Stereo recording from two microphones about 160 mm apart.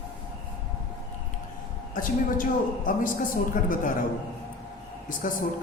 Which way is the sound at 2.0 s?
60° left (ahead or behind).